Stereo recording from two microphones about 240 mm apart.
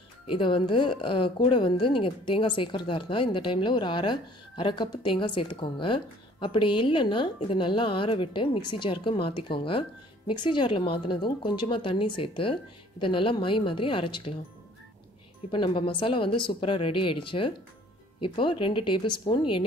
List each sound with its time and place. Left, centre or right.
0.3 s a woman's voice: left
15.5 s a woman's voice: left